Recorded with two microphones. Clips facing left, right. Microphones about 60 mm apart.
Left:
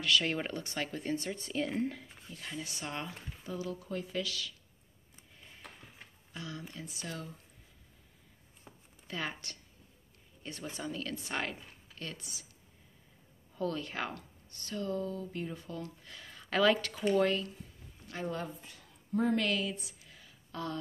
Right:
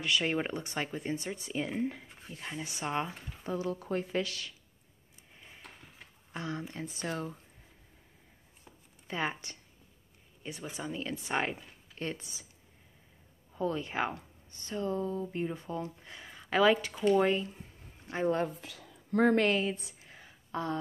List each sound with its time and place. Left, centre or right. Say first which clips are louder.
0.0 s speech: right 1 dB; right
2.2 s speech: right 2 dB; right
5.3 s a sound: right 2 dB; centre
6.3 s speech: right 6 dB; right
9.0 s speech: right 4 dB; right
10.4 s speech: right 1 dB; centre; by 12.4 s right
13.6 s speech: right 3 dB; centre
18.6 s a sound: right 5 dB; right
19.3 s a woman's voice: right 4 dB; right